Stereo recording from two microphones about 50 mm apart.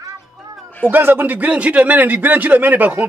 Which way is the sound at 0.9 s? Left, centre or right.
Right.